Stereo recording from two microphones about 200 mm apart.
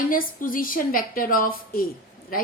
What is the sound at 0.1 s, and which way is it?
A woman's voice, 45° left (ahead or behind).